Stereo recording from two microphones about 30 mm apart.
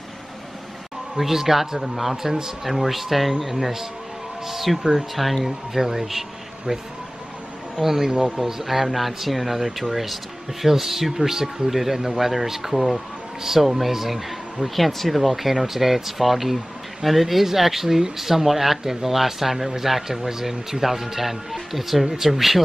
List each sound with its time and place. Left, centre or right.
1.1 s speech: centre
5.7 s speech: centre
7.7 s speech: centre
8.1 s speech: right
8.5 s speech: centre